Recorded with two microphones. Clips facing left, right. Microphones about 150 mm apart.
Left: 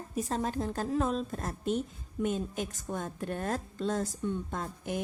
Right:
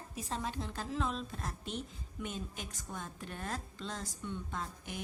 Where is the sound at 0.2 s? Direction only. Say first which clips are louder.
Left 7 dB; 45° left (ahead or behind).